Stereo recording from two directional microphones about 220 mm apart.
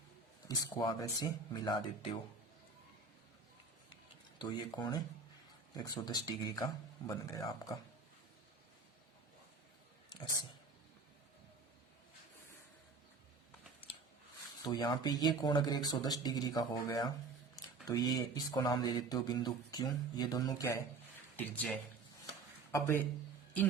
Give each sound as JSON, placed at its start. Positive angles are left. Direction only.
{"t": 0.4, "sound": "speech", "side_deg": 15}
{"t": 4.4, "sound": "speech", "side_deg": 20}
{"t": 14.6, "sound": "speech", "side_deg": 20}